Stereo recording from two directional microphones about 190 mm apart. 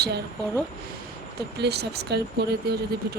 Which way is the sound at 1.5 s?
60° right (ahead or behind).